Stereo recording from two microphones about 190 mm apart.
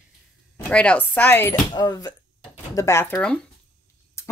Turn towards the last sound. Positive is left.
turn(degrees=5)  # may be behind; listen again after turning